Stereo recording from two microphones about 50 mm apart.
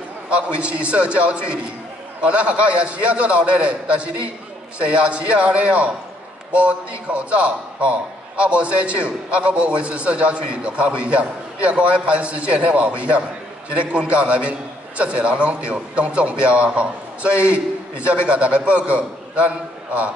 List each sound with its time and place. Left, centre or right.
0.5 s a man's voice: right